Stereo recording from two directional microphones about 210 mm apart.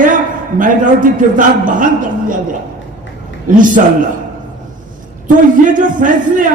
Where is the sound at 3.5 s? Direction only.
40° right (ahead or behind).